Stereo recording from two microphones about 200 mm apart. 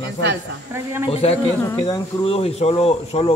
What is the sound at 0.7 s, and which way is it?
Speech, 10° right (ahead or behind).